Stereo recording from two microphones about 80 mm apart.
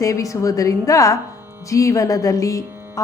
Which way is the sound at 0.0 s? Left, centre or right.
Left.